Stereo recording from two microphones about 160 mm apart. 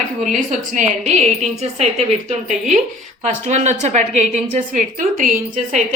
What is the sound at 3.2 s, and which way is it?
A woman's voice, 45° right (ahead or behind).